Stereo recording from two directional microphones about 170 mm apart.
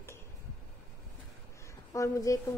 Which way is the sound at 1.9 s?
20° left (ahead or behind).